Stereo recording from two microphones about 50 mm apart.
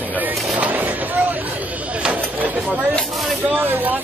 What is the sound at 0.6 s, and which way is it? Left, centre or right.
Vehicle, right.